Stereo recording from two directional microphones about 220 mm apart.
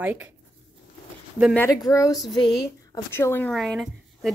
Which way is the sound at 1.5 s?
10° left (ahead or behind).